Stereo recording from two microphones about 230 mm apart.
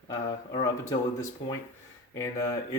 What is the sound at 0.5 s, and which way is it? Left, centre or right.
Speech, centre.